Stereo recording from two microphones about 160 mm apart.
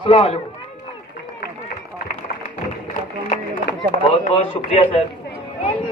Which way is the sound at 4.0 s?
30° left (ahead or behind).